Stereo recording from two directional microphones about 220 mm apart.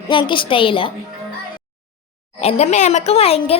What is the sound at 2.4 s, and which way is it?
Speech, 30° left (ahead or behind).